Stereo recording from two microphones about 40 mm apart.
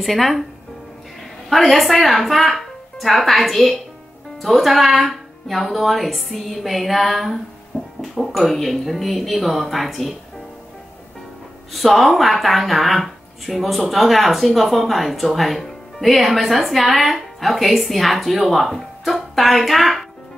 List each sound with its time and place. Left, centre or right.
0.0 s speech: centre
1.5 s speech: centre
11.7 s speech: centre